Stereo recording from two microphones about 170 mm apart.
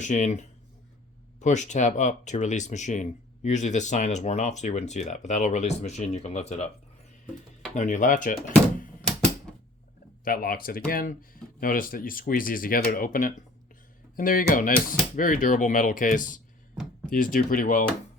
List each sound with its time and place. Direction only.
0.0 s speech: 45° left (ahead or behind)
7.8 s speech: 50° left (ahead or behind)
9.0 s typewriter: 5° left (ahead or behind)
10.2 s speech: 60° left (ahead or behind)